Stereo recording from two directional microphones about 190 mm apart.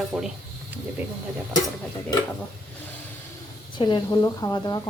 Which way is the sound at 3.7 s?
25° left (ahead or behind).